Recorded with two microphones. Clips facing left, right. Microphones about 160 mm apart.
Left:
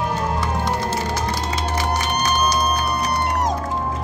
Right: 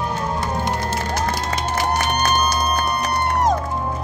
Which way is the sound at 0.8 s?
55° right (ahead or behind).